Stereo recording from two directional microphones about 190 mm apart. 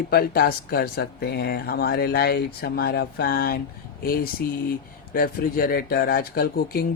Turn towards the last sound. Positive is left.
turn(degrees=50)  # may be behind; listen again after turning